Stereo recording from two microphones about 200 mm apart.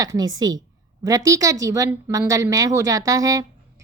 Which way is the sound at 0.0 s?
20° right (ahead or behind).